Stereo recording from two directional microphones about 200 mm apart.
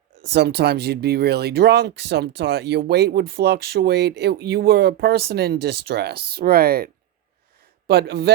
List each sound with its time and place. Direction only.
0.3 s speech: 55° right (ahead or behind)